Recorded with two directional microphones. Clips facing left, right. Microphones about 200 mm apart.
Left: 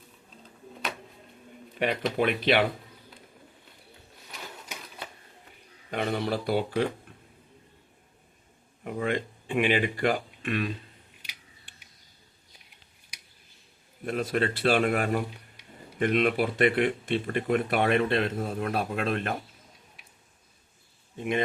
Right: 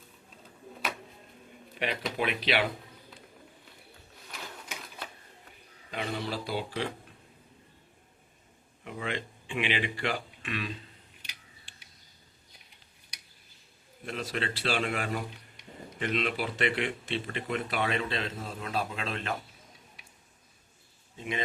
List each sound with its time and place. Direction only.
1.8 s speech: 50° left (ahead or behind)
4.3 s sewing machine: centre (ahead or behind)
5.9 s speech: 55° left (ahead or behind)
8.8 s speech: 50° left (ahead or behind)
14.0 s speech: 50° left (ahead or behind)
21.2 s speech: 55° left (ahead or behind)